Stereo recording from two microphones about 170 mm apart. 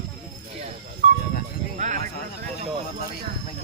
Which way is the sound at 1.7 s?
50° right (ahead or behind).